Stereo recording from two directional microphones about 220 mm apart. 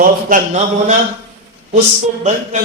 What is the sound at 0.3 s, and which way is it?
Speech, 40° right (ahead or behind).